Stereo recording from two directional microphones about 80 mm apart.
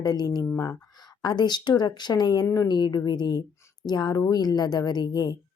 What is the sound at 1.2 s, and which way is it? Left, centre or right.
A woman's voice, left.